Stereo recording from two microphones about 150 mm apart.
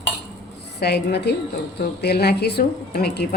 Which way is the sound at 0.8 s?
90° left.